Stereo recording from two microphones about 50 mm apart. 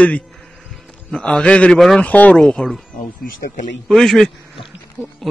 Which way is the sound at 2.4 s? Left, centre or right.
Centre.